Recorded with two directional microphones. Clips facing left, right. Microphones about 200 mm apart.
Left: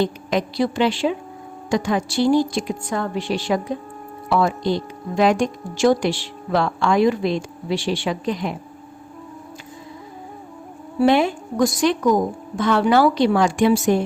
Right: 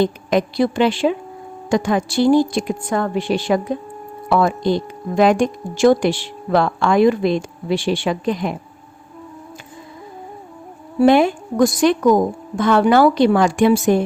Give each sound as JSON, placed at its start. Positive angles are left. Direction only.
{"t": 0.0, "sound": "speech", "side_deg": -50}
{"t": 11.0, "sound": "speech", "side_deg": -50}